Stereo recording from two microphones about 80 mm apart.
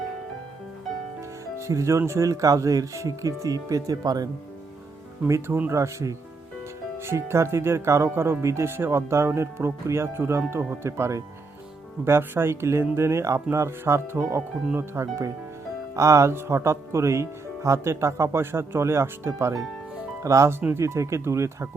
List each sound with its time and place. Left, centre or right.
1.5 s speech: right
5.3 s speech: right
5.7 s speech: right
10.5 s speech: right
10.8 s speech: right
20.6 s speech: right
20.8 s speech: right